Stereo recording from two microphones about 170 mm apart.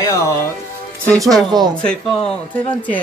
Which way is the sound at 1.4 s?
25° right (ahead or behind).